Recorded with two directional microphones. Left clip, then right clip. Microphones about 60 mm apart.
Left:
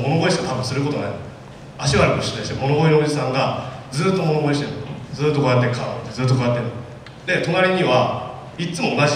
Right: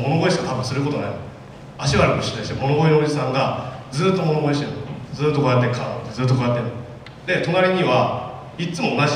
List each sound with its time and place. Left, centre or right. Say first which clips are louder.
0.0 s a man's voice: even; centre